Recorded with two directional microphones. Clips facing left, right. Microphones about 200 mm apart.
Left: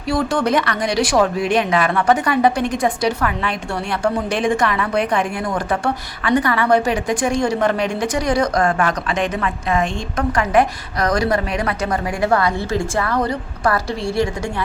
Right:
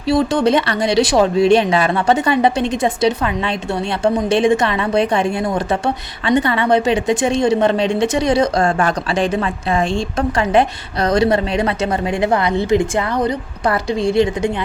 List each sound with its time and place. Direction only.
0.1 s a woman's voice: 25° right (ahead or behind)